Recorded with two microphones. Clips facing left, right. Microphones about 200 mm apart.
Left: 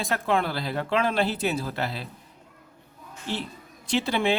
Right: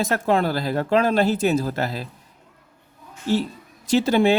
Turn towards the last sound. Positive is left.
turn(degrees=-45)  # may be behind; listen again after turning